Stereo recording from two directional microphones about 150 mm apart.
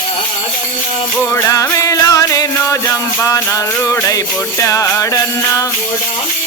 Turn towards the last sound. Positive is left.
turn(degrees=20)  # may be behind; listen again after turning